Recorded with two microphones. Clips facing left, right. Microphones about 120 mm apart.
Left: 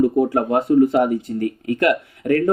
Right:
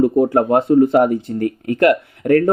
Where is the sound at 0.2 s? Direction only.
35° right (ahead or behind).